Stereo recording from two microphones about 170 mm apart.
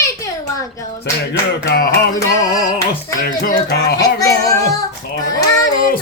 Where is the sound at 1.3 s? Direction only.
70° left (ahead or behind).